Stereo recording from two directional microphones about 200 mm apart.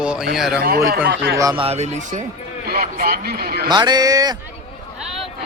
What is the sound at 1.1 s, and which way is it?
Speech, 55° right (ahead or behind).